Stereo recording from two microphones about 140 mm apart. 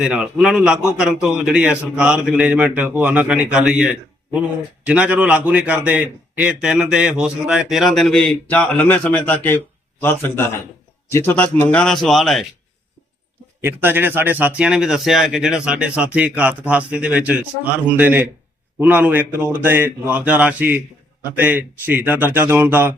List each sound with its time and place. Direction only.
0.0 s a man's voice: 5° right (ahead or behind)
13.6 s a man's voice: 15° right (ahead or behind)